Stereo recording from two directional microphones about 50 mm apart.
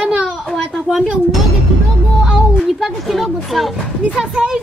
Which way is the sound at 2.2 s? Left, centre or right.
Centre.